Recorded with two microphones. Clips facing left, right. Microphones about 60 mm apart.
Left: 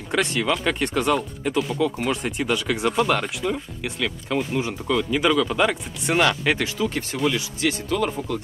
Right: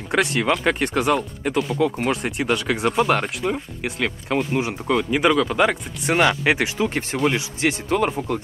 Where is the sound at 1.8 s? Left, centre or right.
Centre.